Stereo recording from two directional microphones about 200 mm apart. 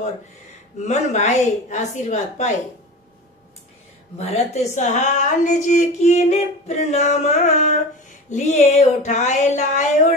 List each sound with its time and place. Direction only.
0.8 s a woman's voice: 35° left (ahead or behind)
4.2 s a woman's voice: 35° left (ahead or behind)